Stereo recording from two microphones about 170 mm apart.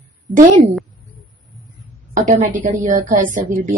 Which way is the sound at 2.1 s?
45° right (ahead or behind).